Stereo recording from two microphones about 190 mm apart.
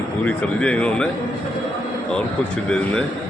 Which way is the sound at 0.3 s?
5° left (ahead or behind).